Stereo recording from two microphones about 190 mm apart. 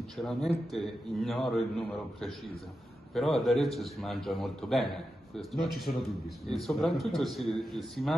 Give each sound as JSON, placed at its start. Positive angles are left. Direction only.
{"t": 0.2, "sound": "a man's voice", "side_deg": 0}